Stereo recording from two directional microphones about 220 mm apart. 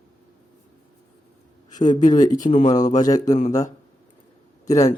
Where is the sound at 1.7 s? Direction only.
20° left (ahead or behind).